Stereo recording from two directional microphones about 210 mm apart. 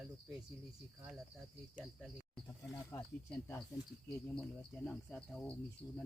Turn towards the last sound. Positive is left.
turn(degrees=5)  # may be behind; listen again after turning